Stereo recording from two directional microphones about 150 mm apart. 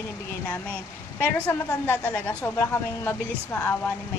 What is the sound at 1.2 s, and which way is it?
A woman's voice, 15° left (ahead or behind).